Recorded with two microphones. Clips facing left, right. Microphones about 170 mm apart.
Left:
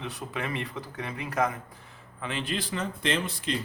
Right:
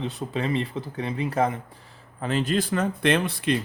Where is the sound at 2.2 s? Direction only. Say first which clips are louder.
Right 8 dB; 40° right (ahead or behind); by 3.5 s 60° right (ahead or behind).